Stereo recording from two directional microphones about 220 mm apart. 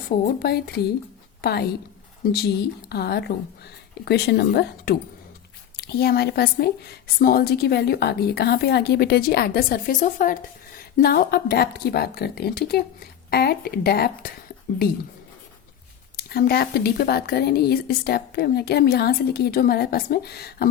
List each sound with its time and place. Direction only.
0.1 s a woman's voice: 40° left (ahead or behind)
1.4 s a woman's voice: 45° left (ahead or behind)
16.1 s a woman's voice: 45° left (ahead or behind)